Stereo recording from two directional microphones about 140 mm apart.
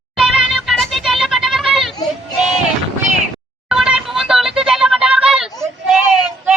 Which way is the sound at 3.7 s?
5° right (ahead or behind).